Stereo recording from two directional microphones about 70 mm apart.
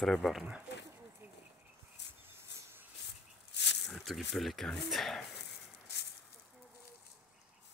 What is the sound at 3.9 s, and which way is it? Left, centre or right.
Speech, centre.